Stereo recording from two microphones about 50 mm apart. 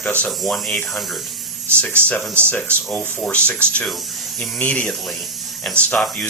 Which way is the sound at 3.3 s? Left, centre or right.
Left.